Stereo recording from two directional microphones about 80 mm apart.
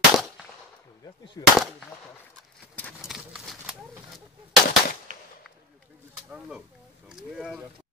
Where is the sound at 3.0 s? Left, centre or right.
Centre.